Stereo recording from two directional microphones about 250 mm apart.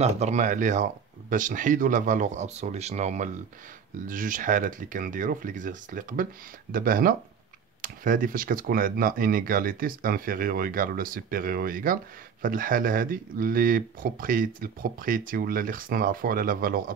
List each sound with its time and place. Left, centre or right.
0.0 s speech: right